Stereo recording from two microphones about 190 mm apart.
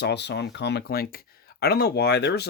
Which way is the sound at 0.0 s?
60° left (ahead or behind).